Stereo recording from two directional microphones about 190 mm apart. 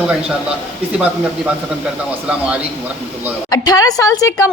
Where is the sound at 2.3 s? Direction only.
5° right (ahead or behind).